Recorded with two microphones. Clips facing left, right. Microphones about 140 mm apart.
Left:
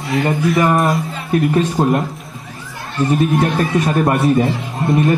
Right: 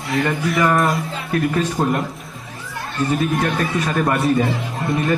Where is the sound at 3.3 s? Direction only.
35° left (ahead or behind).